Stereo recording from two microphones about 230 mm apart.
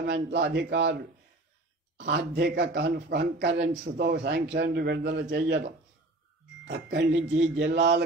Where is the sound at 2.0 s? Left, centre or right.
Right.